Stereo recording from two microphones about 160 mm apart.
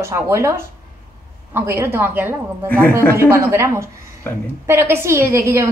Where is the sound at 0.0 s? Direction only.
15° right (ahead or behind).